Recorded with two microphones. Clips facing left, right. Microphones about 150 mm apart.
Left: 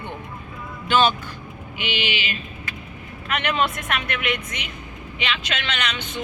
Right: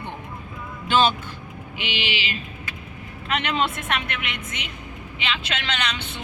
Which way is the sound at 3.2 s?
25° right (ahead or behind).